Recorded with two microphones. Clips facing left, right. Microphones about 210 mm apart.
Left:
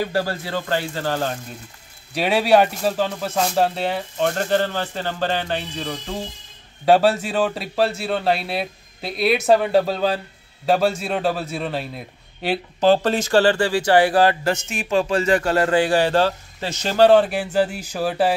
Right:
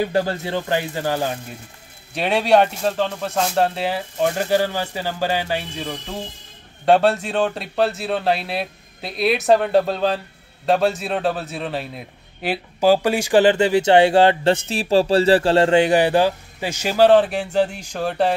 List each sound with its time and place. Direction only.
0.0 s speech: 20° right (ahead or behind)
2.1 s speech: centre (ahead or behind)